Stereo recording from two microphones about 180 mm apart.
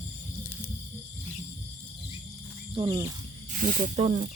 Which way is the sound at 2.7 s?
25° right (ahead or behind).